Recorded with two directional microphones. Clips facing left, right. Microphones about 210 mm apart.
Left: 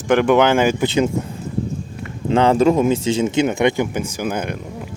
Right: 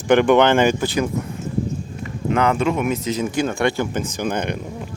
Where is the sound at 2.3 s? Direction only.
30° left (ahead or behind); by 4.6 s 5° left (ahead or behind).